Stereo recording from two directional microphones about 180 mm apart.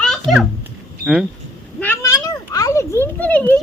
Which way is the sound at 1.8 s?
15° left (ahead or behind).